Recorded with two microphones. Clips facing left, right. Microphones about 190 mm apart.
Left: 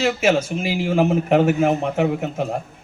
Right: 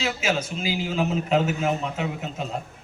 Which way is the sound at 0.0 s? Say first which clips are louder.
Left 8 dB; 55° left (ahead or behind).